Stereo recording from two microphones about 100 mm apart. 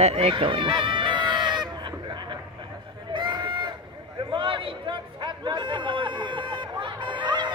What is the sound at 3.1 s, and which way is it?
Honk, 50° right (ahead or behind).